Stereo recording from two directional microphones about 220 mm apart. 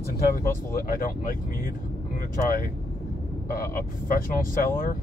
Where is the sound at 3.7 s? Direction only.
40° left (ahead or behind).